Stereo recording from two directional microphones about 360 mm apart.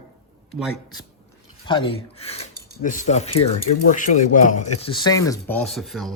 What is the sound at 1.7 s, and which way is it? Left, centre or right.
Speech, centre.